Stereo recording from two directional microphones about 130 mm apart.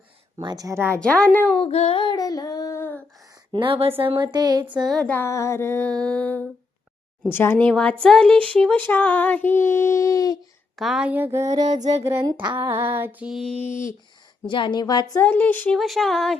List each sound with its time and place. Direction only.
0.3 s speech: 30° right (ahead or behind)
0.9 s speech: 10° left (ahead or behind)
1.5 s music: 50° left (ahead or behind)
2.1 s female singing: 30° left (ahead or behind)
3.5 s speech: 40° right (ahead or behind)
4.9 s speech: 5° left (ahead or behind); by 10.3 s 25° left (ahead or behind)
10.8 s speech: 5° right (ahead or behind); by 11.8 s 30° right (ahead or behind)
11.8 s a sound: 60° right (ahead or behind)
12.2 s speech: 30° right (ahead or behind)
12.5 s female singing: 20° right (ahead or behind)
13.7 s a sound: 20° left (ahead or behind)
14.4 s a woman's voice: 40° left (ahead or behind)
15.1 s speech: 15° left (ahead or behind)
15.8 s speech: centre (ahead or behind)